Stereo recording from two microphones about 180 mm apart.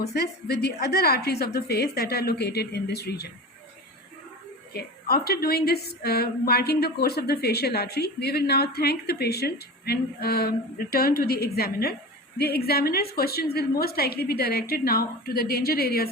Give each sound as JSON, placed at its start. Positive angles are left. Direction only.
{"t": 0.0, "sound": "a woman's voice", "side_deg": 65}
{"t": 4.7, "sound": "a woman's voice", "side_deg": 60}